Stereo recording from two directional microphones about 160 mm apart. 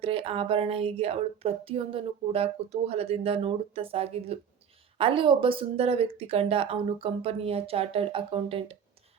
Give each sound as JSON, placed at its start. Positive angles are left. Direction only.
{"t": 0.0, "sound": "speech", "side_deg": -35}